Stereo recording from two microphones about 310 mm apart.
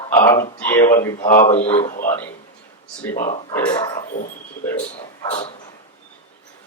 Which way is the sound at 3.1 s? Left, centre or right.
Left.